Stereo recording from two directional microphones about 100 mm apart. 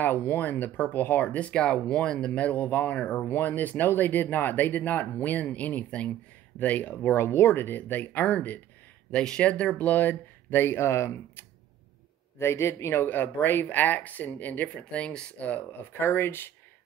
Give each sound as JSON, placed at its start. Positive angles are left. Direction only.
{"t": 0.0, "sound": "speech", "side_deg": 20}